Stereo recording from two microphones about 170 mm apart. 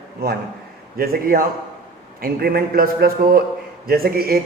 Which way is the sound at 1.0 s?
60° right (ahead or behind).